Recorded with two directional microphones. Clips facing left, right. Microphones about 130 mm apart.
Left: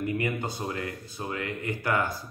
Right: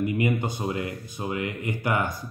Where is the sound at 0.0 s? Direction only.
15° right (ahead or behind).